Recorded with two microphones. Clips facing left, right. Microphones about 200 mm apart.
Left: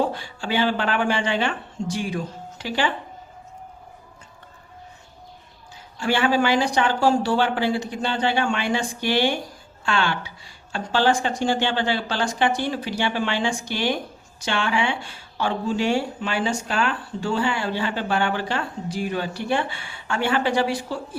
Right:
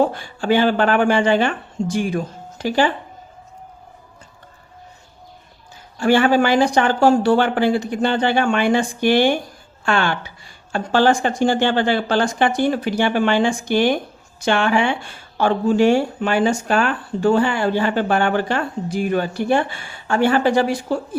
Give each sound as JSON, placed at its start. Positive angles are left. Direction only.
{"t": 0.0, "sound": "speech", "side_deg": -50}
{"t": 6.0, "sound": "speech", "side_deg": -45}